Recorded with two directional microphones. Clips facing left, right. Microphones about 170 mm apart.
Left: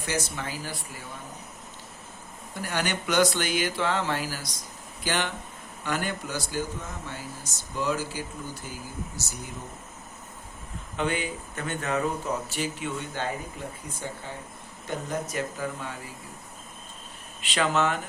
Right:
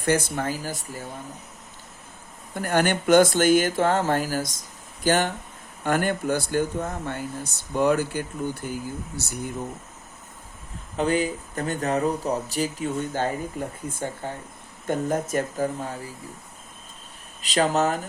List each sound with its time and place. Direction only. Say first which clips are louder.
0.0 s speech: right 8 dB; 55° right (ahead or behind)
2.6 s speech: right 7 dB; 50° right (ahead or behind)
10.9 s speech: right 6 dB; 40° right (ahead or behind)
17.4 s speech: right 3 dB; 40° right (ahead or behind)